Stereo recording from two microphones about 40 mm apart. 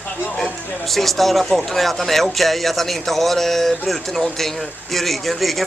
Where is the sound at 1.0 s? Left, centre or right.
Centre.